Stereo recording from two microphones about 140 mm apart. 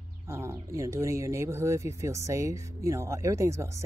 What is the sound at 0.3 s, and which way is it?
Speech, 20° right (ahead or behind).